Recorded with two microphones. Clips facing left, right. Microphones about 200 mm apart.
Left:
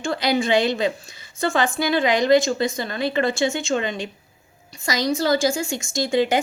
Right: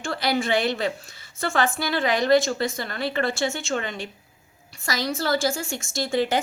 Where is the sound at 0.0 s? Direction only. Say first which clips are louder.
Left 3 dB; 20° left (ahead or behind).